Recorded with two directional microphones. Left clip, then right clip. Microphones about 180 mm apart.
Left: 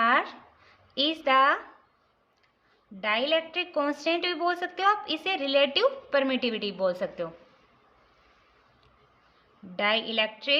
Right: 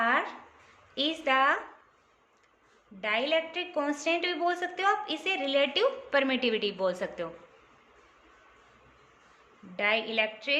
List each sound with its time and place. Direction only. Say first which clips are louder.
0.0 s a sound: left 3 dB; 35° left (ahead or behind)
0.9 s a woman's voice: left 4 dB; 30° left (ahead or behind)
3.0 s a woman's voice: left 2 dB; 30° left (ahead or behind)
9.7 s a woman's voice: left 2 dB; 30° left (ahead or behind)